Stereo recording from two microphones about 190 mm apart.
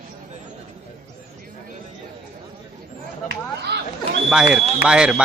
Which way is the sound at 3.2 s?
60° right (ahead or behind).